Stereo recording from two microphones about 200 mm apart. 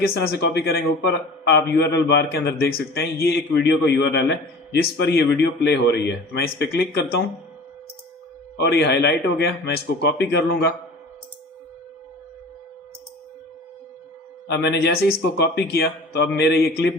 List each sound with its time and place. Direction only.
0.0 s a man's voice: 50° left (ahead or behind)
8.5 s a man's voice: 55° left (ahead or behind)
14.4 s a man's voice: 55° left (ahead or behind)